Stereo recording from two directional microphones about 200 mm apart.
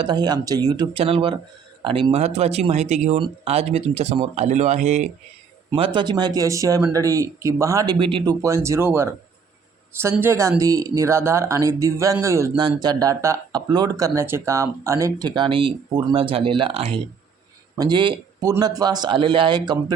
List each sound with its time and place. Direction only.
0.0 s speech: 20° right (ahead or behind)
5.7 s speech: 25° right (ahead or behind)
7.9 s speech: 25° right (ahead or behind)